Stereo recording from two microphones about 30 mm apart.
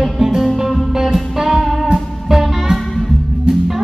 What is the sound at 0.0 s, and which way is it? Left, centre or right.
Music, centre.